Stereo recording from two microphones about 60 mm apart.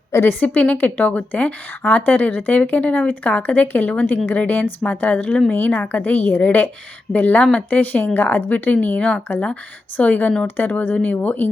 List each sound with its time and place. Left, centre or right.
0.1 s a woman's voice: left
0.3 s a woman's voice: left
9.0 s a woman's voice: left